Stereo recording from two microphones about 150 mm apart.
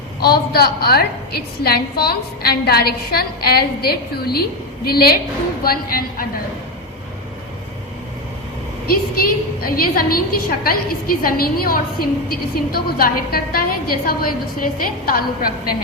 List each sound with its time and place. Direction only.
0.2 s a woman's voice: 90° left
8.9 s a woman's voice: 80° left